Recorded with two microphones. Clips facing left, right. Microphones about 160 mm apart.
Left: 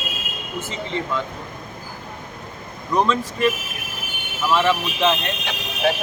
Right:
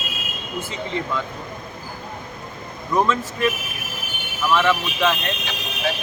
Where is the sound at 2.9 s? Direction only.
5° right (ahead or behind).